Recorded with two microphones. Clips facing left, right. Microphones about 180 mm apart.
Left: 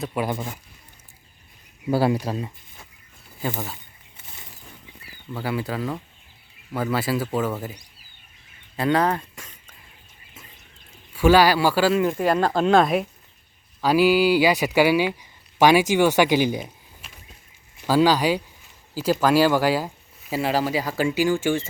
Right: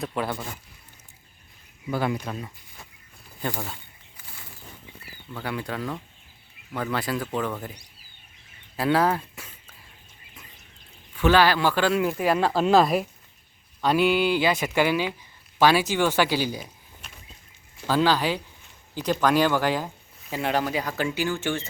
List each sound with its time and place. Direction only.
0.1 s speech: 15° left (ahead or behind)
1.9 s speech: 35° left (ahead or behind)
3.4 s speech: 5° left (ahead or behind)
5.3 s speech: 5° left (ahead or behind)
11.1 s speech: 10° left (ahead or behind)
17.8 s speech: 10° left (ahead or behind)